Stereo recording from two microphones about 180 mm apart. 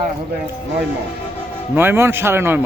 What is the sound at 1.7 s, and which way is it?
Speech, 10° right (ahead or behind).